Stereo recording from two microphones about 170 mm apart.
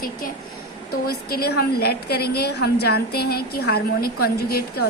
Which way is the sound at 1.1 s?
65° left (ahead or behind).